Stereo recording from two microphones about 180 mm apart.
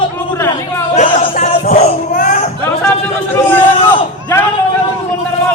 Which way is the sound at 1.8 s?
45° left (ahead or behind).